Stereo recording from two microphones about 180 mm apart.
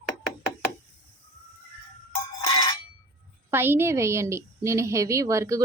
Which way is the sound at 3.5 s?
10° right (ahead or behind).